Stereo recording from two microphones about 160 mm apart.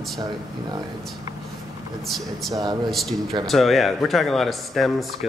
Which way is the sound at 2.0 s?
Centre (ahead or behind).